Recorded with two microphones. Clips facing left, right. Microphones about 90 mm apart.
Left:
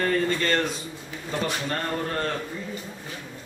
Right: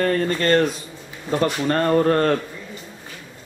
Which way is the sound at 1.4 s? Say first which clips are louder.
Right 10 dB; 60° right (ahead or behind).